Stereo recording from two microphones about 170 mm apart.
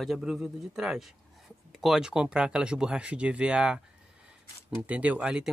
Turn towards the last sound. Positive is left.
turn(degrees=-5)  # may be behind; listen again after turning